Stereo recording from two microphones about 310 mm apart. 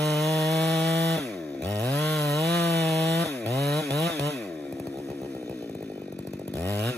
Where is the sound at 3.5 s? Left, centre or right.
Centre.